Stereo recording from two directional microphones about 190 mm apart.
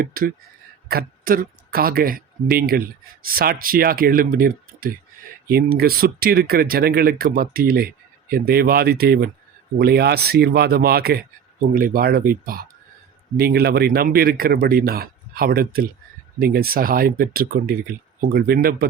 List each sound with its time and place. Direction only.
0.0 s speech: 50° right (ahead or behind)